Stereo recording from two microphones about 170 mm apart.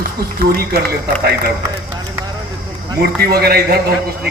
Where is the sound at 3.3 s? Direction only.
65° right (ahead or behind).